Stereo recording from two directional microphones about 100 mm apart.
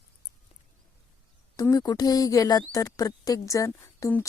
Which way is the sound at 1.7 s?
40° left (ahead or behind).